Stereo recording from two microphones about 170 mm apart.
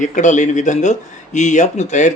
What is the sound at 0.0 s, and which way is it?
Speech, 45° left (ahead or behind).